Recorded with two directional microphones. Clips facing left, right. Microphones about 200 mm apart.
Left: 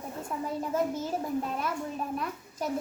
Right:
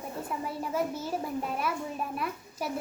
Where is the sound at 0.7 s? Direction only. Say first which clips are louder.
Left 2 dB; 10° right (ahead or behind).